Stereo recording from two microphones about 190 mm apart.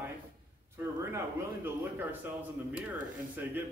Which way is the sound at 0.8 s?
15° right (ahead or behind).